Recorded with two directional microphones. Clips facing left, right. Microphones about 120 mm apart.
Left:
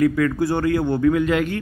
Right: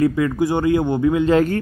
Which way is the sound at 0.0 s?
20° right (ahead or behind).